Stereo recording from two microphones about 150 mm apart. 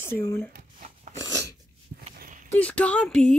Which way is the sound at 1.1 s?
25° left (ahead or behind).